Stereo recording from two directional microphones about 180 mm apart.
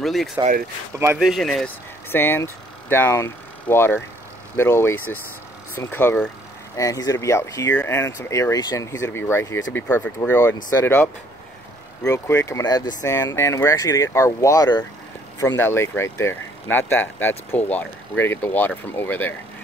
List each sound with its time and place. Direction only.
0.0 s speech: centre (ahead or behind)
0.9 s speech: 10° right (ahead or behind)
2.0 s speech: 10° left (ahead or behind)
12.1 s speech: 15° left (ahead or behind)